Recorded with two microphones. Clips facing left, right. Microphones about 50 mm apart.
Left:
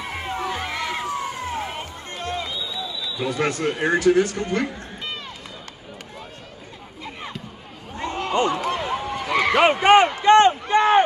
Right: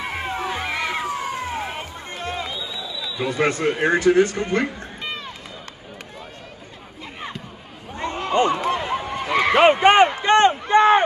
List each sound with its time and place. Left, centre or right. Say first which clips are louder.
0.0 s run: right 1 dB; right
3.2 s speech: right 2 dB; right
7.9 s a sound: right 2 dB; right